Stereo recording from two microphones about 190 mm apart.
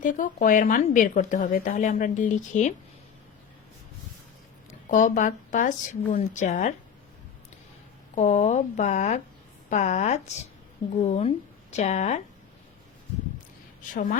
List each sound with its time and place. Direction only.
0.0 s a woman's voice: 45° left (ahead or behind)
4.7 s speech: 40° left (ahead or behind)
8.1 s speech: 40° left (ahead or behind)
13.9 s speech: 40° left (ahead or behind)